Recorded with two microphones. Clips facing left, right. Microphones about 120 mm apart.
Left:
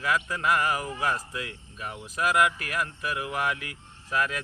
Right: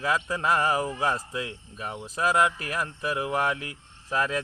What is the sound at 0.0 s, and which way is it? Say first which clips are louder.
Speech: right 1 dB; 30° right (ahead or behind).